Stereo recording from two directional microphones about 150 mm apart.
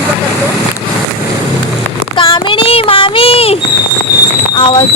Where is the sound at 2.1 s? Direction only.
35° left (ahead or behind).